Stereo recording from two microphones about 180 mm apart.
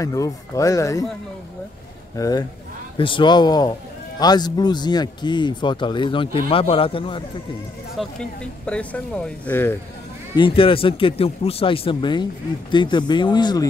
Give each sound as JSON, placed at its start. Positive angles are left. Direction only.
{"t": 0.0, "sound": "speech", "side_deg": 20}
{"t": 2.1, "sound": "a man's voice", "side_deg": 20}
{"t": 7.9, "sound": "speech", "side_deg": 0}
{"t": 10.3, "sound": "a man's voice", "side_deg": 30}